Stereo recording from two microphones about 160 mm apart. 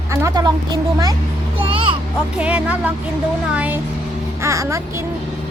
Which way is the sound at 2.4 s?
5° right (ahead or behind).